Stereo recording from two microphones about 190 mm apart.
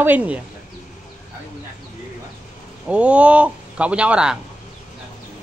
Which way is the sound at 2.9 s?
5° right (ahead or behind).